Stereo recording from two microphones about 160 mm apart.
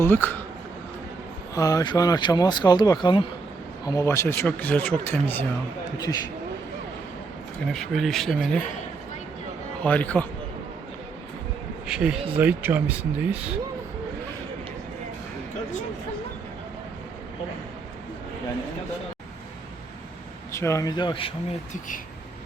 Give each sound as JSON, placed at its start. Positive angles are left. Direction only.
{"t": 0.0, "sound": "speech", "side_deg": 10}
{"t": 1.5, "sound": "speech", "side_deg": 20}
{"t": 3.8, "sound": "speech", "side_deg": 20}
{"t": 7.7, "sound": "speech", "side_deg": 0}
{"t": 9.8, "sound": "speech", "side_deg": 10}
{"t": 11.9, "sound": "speech", "side_deg": -5}
{"t": 20.5, "sound": "speech", "side_deg": 20}